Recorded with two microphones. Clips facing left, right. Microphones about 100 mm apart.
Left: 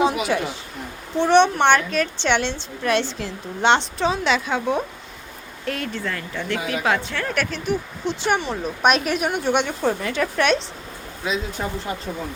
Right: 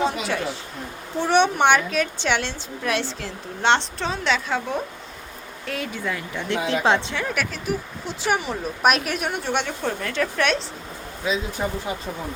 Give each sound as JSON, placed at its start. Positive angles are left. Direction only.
{"t": 0.0, "sound": "a woman's voice", "side_deg": 5}
{"t": 1.2, "sound": "a woman's voice", "side_deg": -10}
{"t": 6.7, "sound": "a woman's voice", "side_deg": -25}
{"t": 7.3, "sound": "a woman's voice", "side_deg": -5}
{"t": 11.6, "sound": "speech", "side_deg": -10}